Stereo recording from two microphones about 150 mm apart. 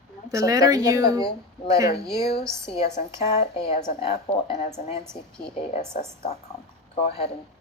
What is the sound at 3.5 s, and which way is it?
A woman's voice, 35° left (ahead or behind).